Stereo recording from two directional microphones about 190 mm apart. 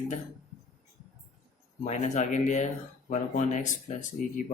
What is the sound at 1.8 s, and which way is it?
Speech, 40° left (ahead or behind).